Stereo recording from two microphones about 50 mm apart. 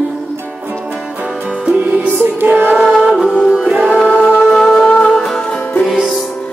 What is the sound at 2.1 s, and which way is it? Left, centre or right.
Music, right.